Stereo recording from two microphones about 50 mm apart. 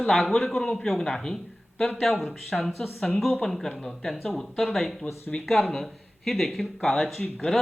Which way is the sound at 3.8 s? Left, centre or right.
Centre.